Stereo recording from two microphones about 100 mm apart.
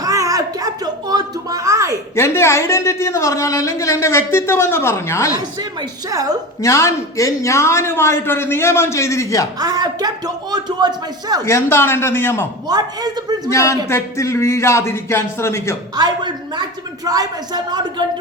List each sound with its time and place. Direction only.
0.0 s a sound: 35° right (ahead or behind)
2.1 s a woman's voice: 25° left (ahead or behind)
6.1 s speech: 35° right (ahead or behind)
6.6 s a woman's voice: 30° left (ahead or behind)
9.6 s speech: 40° right (ahead or behind)
11.4 s a woman's voice: 25° left (ahead or behind)
12.6 s speech: 40° right (ahead or behind)
13.5 s a woman's voice: 30° left (ahead or behind)
16.0 s speech: 45° right (ahead or behind)